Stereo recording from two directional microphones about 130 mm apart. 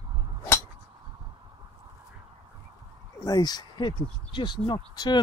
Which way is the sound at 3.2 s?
30° left (ahead or behind).